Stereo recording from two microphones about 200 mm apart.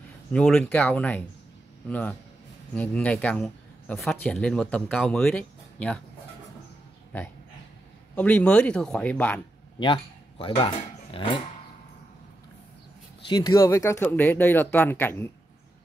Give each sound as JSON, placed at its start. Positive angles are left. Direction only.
{"t": 0.3, "sound": "speech", "side_deg": 5}
{"t": 8.2, "sound": "speech", "side_deg": 5}
{"t": 9.8, "sound": "speech", "side_deg": 25}
{"t": 13.3, "sound": "speech", "side_deg": 15}